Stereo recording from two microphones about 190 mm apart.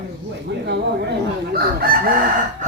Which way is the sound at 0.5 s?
70° right (ahead or behind).